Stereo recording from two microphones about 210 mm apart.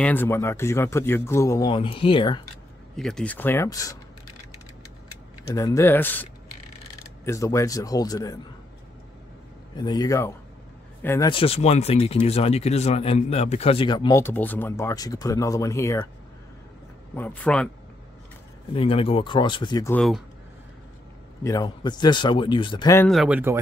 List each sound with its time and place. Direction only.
0.0 s speech: 10° left (ahead or behind)
3.0 s speech: centre (ahead or behind)
5.5 s speech: 15° left (ahead or behind)
7.2 s speech: 15° left (ahead or behind)
9.8 s speech: 20° left (ahead or behind)
11.2 s speech: 25° left (ahead or behind)
17.1 s speech: 5° left (ahead or behind)
18.7 s speech: 25° left (ahead or behind)
19.9 s speech: centre (ahead or behind)
21.4 s speech: 15° left (ahead or behind)
22.9 s speech: centre (ahead or behind)